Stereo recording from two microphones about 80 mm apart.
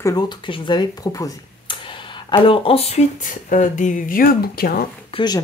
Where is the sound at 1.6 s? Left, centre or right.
Left.